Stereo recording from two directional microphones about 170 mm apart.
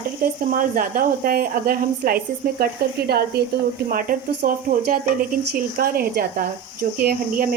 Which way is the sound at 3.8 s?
55° right (ahead or behind).